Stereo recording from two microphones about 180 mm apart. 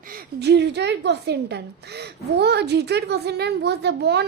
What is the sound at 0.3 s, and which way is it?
A woman's voice, 70° right (ahead or behind).